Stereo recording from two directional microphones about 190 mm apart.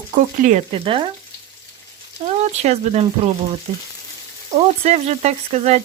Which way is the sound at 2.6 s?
35° right (ahead or behind).